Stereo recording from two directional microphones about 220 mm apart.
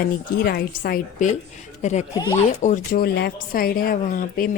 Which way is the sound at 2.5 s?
35° left (ahead or behind).